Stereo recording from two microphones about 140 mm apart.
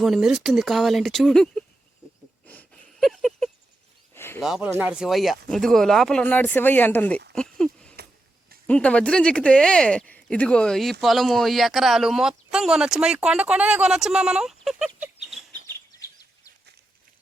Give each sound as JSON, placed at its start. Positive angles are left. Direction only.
{"t": 0.0, "sound": "speech", "side_deg": 0}
{"t": 2.5, "sound": "a sound", "side_deg": 10}
{"t": 4.1, "sound": "a sound", "side_deg": 15}
{"t": 4.4, "sound": "speech", "side_deg": -5}
{"t": 14.9, "sound": "bird", "side_deg": -5}
{"t": 15.6, "sound": "bird vocalization", "side_deg": 25}